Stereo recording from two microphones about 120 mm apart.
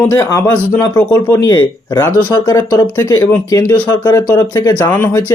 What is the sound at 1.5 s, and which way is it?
Speech, 30° left (ahead or behind).